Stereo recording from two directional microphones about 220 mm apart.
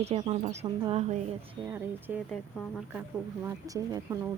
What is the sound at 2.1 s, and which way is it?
Speech, 5° right (ahead or behind).